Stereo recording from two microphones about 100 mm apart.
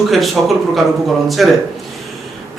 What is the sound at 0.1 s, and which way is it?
A man's voice, centre (ahead or behind).